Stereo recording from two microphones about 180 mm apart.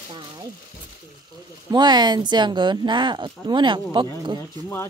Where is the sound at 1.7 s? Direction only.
25° right (ahead or behind).